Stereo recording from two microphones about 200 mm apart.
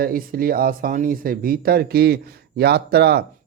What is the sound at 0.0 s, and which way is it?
Speech, 45° right (ahead or behind).